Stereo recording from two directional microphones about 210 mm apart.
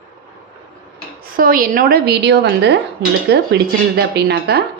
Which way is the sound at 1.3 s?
45° right (ahead or behind).